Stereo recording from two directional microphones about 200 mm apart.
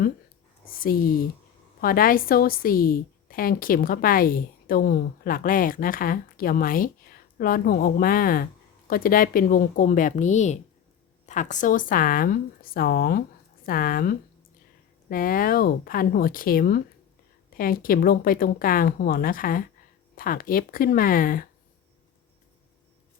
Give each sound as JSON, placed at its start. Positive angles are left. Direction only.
{"t": 0.6, "sound": "a woman's voice", "side_deg": 45}